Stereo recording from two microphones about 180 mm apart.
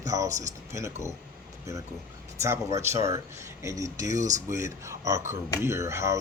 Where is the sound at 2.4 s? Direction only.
15° right (ahead or behind).